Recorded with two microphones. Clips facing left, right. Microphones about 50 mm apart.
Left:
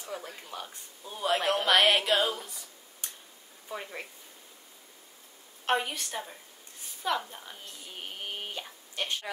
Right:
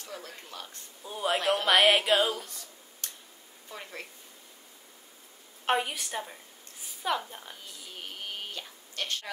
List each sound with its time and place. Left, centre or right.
0.0 s speech: centre
1.0 s speech: centre
2.3 s a sound: centre
3.6 s speech: centre
5.7 s speech: centre
7.9 s a sound: centre